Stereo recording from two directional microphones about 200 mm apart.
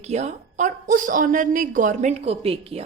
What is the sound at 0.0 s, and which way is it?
A woman's voice, 35° right (ahead or behind).